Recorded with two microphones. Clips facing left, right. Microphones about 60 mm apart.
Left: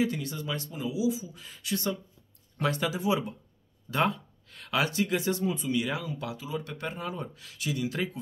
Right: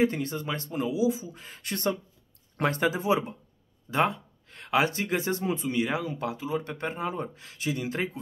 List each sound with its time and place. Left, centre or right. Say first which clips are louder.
0.0 s speech: right 4 dB; right
2.6 s speech: right 3 dB; right